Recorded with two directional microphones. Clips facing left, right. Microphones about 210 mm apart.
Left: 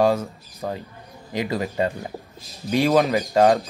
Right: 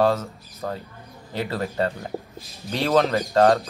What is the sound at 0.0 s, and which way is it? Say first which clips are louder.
Speech: left 1 dB; 15° left (ahead or behind).